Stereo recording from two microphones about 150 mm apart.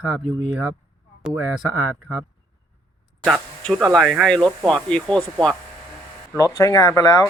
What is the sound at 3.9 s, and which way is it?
Speech, centre (ahead or behind).